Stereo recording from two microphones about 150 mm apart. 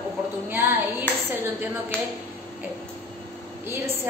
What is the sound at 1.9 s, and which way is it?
Speech, 10° left (ahead or behind).